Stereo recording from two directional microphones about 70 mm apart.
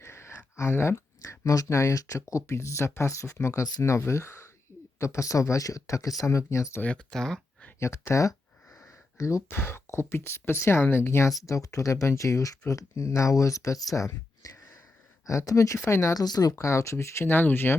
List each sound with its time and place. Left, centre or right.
0.0 s speech: left
7.1 s a sound: centre
7.8 s speech: left
9.5 s speech: left
11.4 s speech: left
16.1 s speech: left
16.6 s speech: left